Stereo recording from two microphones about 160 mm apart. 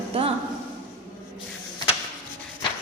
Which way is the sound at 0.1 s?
40° right (ahead or behind).